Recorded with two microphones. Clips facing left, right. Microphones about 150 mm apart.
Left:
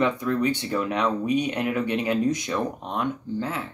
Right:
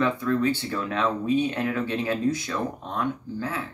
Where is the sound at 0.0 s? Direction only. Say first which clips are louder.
Even; 15° left (ahead or behind).